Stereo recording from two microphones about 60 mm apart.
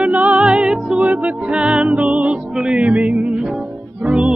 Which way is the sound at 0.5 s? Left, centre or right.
Centre.